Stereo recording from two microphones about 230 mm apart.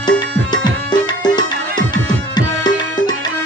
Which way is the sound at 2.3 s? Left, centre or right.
Centre.